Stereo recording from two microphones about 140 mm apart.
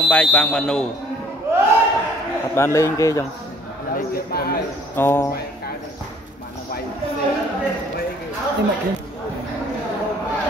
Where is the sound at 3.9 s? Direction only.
90° left.